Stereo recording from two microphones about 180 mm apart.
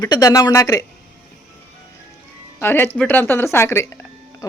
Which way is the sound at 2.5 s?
10° left (ahead or behind).